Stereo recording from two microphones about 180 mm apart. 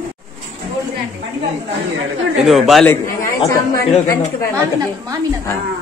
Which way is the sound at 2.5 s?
Centre (ahead or behind).